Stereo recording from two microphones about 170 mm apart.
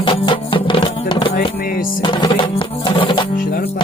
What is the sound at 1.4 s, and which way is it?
Music, 60° left (ahead or behind).